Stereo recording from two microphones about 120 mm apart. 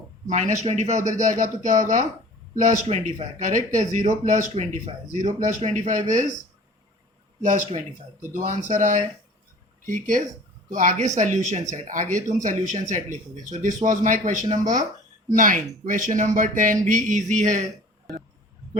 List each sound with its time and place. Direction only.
0.3 s speech: 80° right
2.8 s speech: 65° right (ahead or behind); by 6.2 s 90° right
8.3 s speech: 90° right
11.7 s speech: 90° right